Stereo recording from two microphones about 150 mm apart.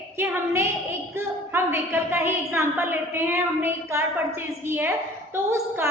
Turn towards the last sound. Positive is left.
turn(degrees=-20)  # may be behind; listen again after turning